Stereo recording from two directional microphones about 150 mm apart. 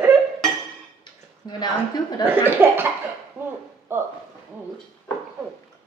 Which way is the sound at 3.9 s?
15° right (ahead or behind).